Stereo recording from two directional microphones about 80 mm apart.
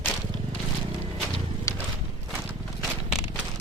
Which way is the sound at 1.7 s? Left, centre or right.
Left.